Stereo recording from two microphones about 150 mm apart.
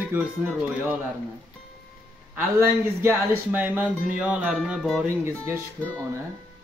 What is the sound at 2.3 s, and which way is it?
Speech, 15° right (ahead or behind).